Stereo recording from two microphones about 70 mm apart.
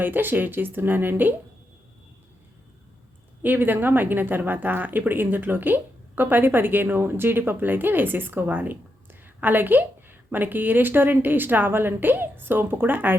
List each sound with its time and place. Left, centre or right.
0.0 s speech: right
3.4 s speech: right